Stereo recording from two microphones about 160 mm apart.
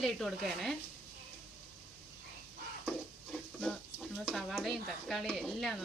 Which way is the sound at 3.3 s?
5° left (ahead or behind).